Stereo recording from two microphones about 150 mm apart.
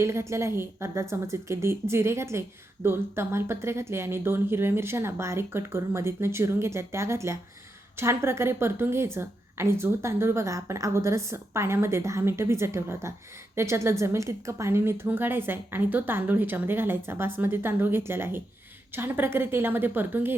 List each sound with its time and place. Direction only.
0.0 s a woman's voice: 20° right (ahead or behind)